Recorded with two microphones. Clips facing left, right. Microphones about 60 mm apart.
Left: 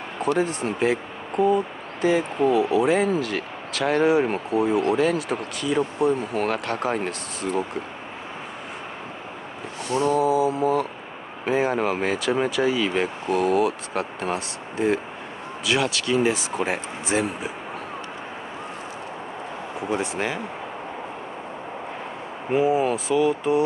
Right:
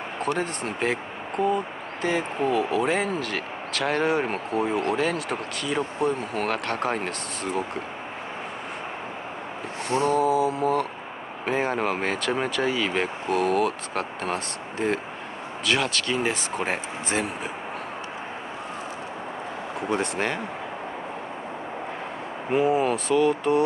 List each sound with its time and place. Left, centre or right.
0.4 s speech: centre
9.8 s a sound: right
10.2 s mantra: centre
11.4 s speech: centre
19.9 s speech: centre
22.5 s speech: centre